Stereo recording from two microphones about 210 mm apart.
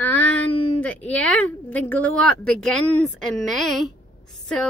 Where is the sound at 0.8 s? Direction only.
5° left (ahead or behind).